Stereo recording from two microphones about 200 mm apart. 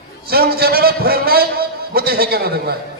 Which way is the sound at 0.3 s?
50° right (ahead or behind).